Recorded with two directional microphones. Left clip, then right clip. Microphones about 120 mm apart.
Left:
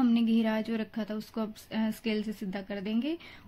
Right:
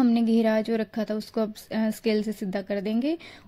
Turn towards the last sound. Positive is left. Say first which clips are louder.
# right 6 dB
turn(degrees=-60)  # may be behind; listen again after turning